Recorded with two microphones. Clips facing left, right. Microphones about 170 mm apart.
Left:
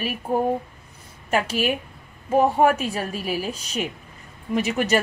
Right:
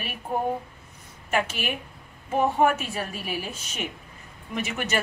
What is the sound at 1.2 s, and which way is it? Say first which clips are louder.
Speech: left 5 dB; 35° left (ahead or behind).